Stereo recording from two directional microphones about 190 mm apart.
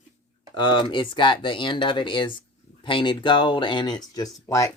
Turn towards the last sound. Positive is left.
turn(degrees=20)  # may be behind; listen again after turning